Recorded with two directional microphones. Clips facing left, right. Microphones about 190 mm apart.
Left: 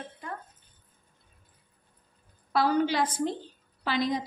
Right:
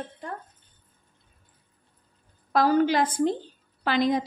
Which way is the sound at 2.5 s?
45° right (ahead or behind).